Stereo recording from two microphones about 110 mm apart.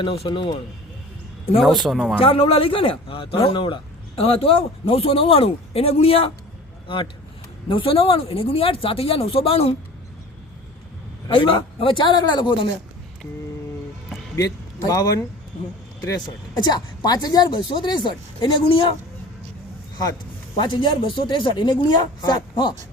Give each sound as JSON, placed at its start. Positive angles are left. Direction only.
{"t": 0.0, "sound": "speech", "side_deg": 55}
{"t": 1.6, "sound": "speech", "side_deg": 0}
{"t": 2.1, "sound": "a man's voice", "side_deg": 55}
{"t": 11.3, "sound": "speech", "side_deg": 50}
{"t": 14.3, "sound": "a man's voice", "side_deg": 35}
{"t": 16.6, "sound": "speech", "side_deg": 40}
{"t": 20.6, "sound": "speech", "side_deg": 50}